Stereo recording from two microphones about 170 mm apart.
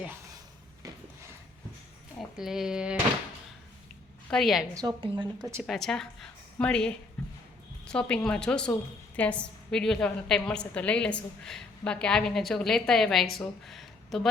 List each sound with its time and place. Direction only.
2.1 s speech: centre (ahead or behind)
4.3 s a woman's voice: centre (ahead or behind)
4.7 s speech: 25° right (ahead or behind)
5.6 s a woman's voice: centre (ahead or behind)
13.7 s a sound: centre (ahead or behind)